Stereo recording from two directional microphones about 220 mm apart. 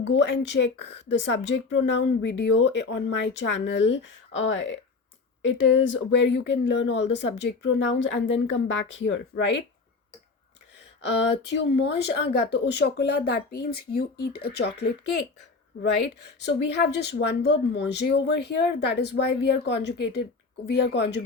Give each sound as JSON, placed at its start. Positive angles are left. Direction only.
{"t": 0.0, "sound": "speech", "side_deg": 55}
{"t": 11.4, "sound": "speech", "side_deg": 50}